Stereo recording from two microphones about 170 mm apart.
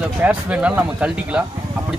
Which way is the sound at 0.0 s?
10° right (ahead or behind).